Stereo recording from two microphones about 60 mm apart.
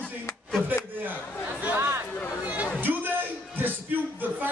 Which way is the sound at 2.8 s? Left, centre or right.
Right.